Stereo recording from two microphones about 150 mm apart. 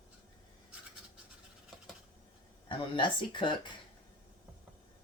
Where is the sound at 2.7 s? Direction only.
35° left (ahead or behind).